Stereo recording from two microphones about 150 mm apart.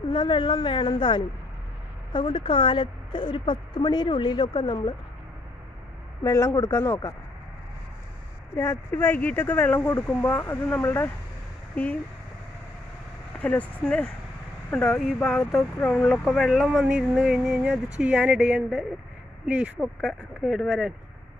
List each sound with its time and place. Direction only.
0.1 s a woman's voice: 30° left (ahead or behind)
6.2 s speech: 20° left (ahead or behind)
8.5 s speech: 15° left (ahead or behind)
13.4 s speech: 10° left (ahead or behind)